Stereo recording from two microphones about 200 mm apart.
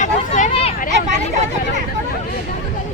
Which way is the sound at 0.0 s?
40° left (ahead or behind).